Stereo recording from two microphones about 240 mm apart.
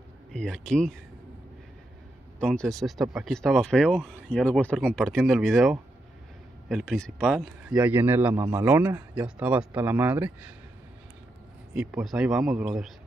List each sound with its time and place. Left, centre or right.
0.3 s speech: centre
2.4 s speech: centre
11.7 s speech: centre